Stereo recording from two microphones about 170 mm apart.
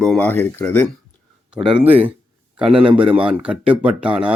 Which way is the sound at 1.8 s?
10° right (ahead or behind).